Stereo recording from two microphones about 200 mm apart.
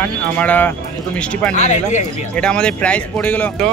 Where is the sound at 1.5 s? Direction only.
35° left (ahead or behind).